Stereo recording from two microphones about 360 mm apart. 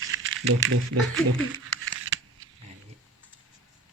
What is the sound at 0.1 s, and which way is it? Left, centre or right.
Music, right.